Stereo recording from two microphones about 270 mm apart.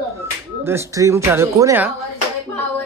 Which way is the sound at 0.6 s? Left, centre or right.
Centre.